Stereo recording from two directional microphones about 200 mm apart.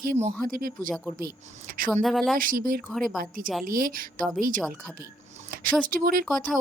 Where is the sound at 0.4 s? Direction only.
45° right (ahead or behind).